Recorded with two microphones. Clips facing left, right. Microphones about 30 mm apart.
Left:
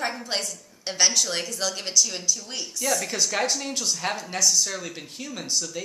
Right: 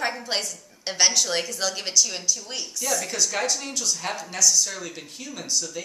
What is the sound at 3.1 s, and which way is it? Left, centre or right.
Speech, centre.